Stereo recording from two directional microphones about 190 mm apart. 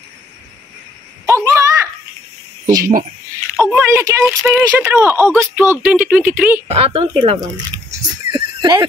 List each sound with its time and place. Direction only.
1.2 s a sound: 15° right (ahead or behind)
2.6 s speech: 20° right (ahead or behind)
3.6 s a sound: 15° right (ahead or behind)
3.9 s speech: 15° right (ahead or behind)
6.7 s speech: 30° right (ahead or behind)
7.9 s horse: 25° right (ahead or behind)